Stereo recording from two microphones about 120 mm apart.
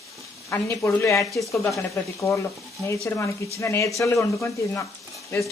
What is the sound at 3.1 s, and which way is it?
Speech, 20° left (ahead or behind).